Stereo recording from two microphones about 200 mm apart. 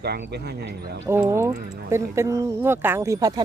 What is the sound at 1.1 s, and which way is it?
Speech, 15° right (ahead or behind).